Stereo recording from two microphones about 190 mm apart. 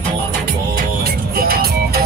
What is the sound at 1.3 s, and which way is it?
Music, 55° right (ahead or behind).